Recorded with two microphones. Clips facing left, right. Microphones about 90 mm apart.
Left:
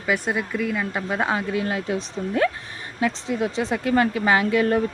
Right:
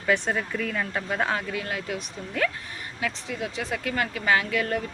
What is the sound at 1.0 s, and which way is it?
Speech, 20° left (ahead or behind).